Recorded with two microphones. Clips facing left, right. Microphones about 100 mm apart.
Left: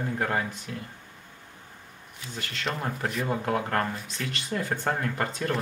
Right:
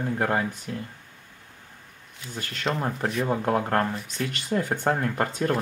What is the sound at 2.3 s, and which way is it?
Speech, 25° right (ahead or behind).